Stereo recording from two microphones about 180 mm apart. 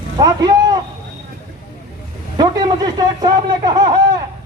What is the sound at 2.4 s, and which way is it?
A man's voice, 25° right (ahead or behind).